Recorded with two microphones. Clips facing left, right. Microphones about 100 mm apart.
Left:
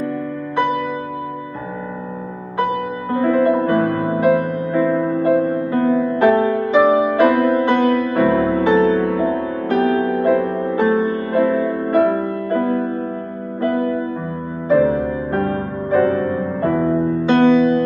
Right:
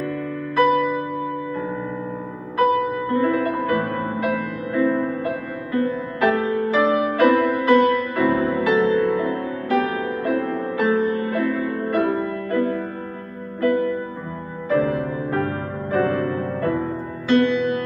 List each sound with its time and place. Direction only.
3.1 s music: 30° left (ahead or behind)
14.7 s music: 30° left (ahead or behind)